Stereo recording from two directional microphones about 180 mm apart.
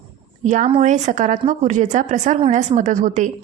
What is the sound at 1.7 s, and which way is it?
A woman's voice, 40° right (ahead or behind).